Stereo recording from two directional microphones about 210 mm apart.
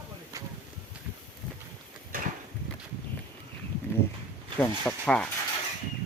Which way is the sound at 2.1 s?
40° right (ahead or behind).